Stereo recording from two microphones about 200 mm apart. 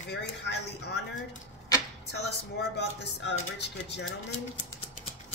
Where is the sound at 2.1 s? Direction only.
60° left (ahead or behind).